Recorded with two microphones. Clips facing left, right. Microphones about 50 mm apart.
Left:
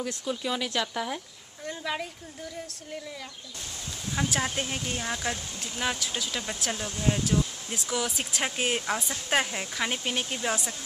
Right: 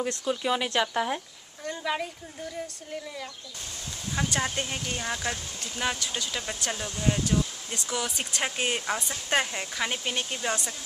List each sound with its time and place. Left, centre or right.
0.2 s speech: centre
1.6 s speech: centre
4.1 s speech: centre